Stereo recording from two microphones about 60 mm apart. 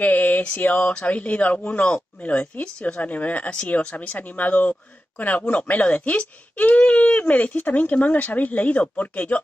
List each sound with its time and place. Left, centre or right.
0.0 s speech: left